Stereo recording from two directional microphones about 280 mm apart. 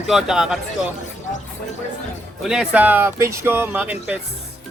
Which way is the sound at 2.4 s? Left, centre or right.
Centre.